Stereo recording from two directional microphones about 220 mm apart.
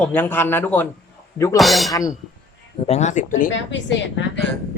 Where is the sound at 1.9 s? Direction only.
15° left (ahead or behind).